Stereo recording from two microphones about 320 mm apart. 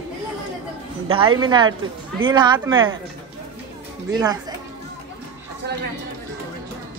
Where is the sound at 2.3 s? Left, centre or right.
Centre.